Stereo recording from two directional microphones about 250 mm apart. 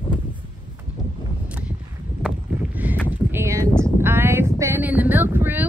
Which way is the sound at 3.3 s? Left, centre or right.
Centre.